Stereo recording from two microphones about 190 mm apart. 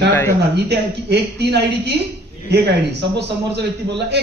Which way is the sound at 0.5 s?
60° right (ahead or behind).